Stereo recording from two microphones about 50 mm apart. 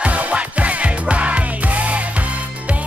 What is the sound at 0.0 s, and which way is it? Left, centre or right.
Music, right.